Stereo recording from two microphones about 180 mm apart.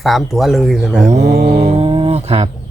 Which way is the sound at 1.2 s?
65° right (ahead or behind).